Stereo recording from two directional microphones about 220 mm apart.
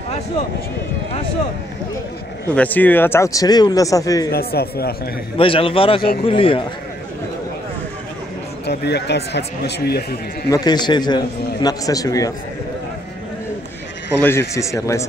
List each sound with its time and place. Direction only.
2.5 s speech: 5° left (ahead or behind)
4.3 s speech: 45° left (ahead or behind)
5.4 s a man's voice: 25° left (ahead or behind)
8.6 s speech: 50° left (ahead or behind)
10.5 s a man's voice: 20° left (ahead or behind)
14.5 s speech: 15° left (ahead or behind)